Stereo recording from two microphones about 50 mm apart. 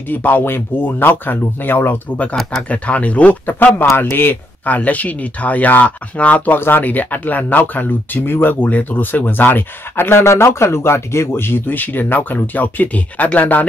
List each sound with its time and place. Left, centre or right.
0.1 s speech: left
2.7 s speech: left
3.4 s speech: left
4.6 s speech: left